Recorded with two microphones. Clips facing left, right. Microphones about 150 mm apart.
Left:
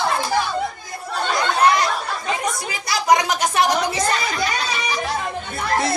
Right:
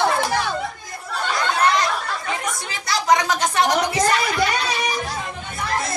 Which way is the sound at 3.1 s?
15° left (ahead or behind).